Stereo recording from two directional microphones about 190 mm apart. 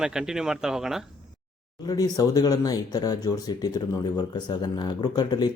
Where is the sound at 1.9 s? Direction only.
20° left (ahead or behind).